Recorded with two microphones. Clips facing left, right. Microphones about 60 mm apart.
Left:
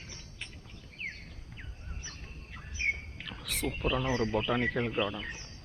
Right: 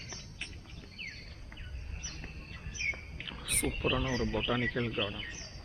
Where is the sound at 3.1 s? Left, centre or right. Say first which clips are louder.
Even; centre.